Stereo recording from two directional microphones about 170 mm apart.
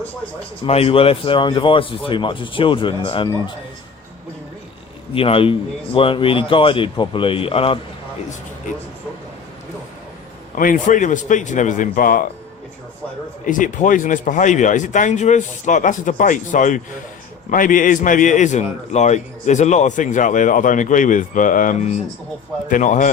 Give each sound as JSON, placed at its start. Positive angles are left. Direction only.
{"t": 0.6, "sound": "speech", "side_deg": 35}
{"t": 5.1, "sound": "speech", "side_deg": 35}
{"t": 10.5, "sound": "a man's voice", "side_deg": 50}
{"t": 13.4, "sound": "a man's voice", "side_deg": 50}